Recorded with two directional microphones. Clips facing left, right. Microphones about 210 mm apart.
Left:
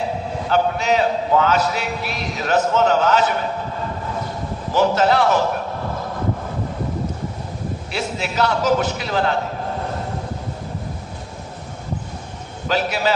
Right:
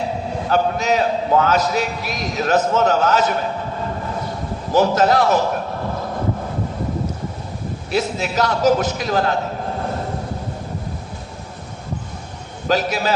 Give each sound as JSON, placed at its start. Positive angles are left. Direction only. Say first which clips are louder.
{"t": 0.5, "sound": "a man's voice", "louder": "even", "side_deg": -40}
{"t": 4.7, "sound": "a man's voice", "louder": "right 1 dB", "side_deg": -40}
{"t": 7.9, "sound": "a man's voice", "louder": "right 6 dB", "side_deg": -40}
{"t": 12.6, "sound": "a man's voice", "louder": "right 1 dB", "side_deg": -40}